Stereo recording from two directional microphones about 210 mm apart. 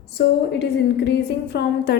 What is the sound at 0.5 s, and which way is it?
A woman's voice, 50° left (ahead or behind).